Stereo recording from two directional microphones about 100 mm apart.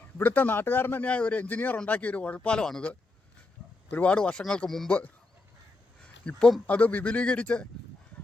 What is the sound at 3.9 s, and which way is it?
Speech, 10° left (ahead or behind).